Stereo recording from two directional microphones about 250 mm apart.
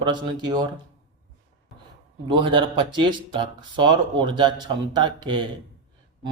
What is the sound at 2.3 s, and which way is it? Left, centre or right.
Speech, centre.